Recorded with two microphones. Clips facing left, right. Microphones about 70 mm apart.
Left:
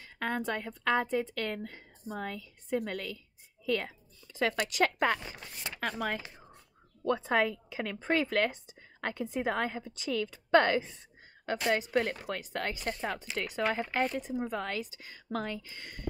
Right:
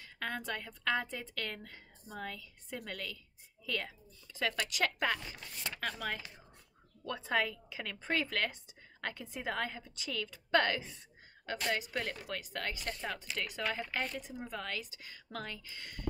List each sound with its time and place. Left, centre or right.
0.0 s a woman's voice: left